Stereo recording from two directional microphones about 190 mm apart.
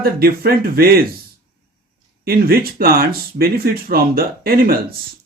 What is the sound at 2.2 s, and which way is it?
Speech, 50° right (ahead or behind).